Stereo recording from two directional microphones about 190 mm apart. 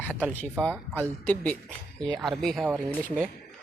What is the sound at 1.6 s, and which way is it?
Speech, 20° right (ahead or behind).